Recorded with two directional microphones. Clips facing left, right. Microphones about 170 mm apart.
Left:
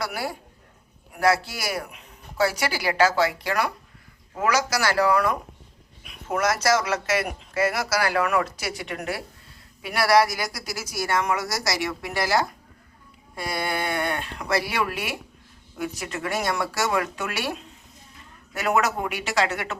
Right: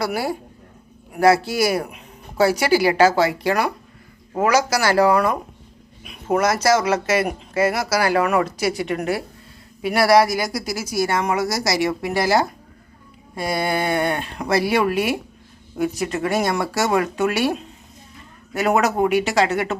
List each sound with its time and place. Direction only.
0.0 s speech: 35° right (ahead or behind)
13.7 s speech: 25° right (ahead or behind)
14.9 s speech: 40° right (ahead or behind)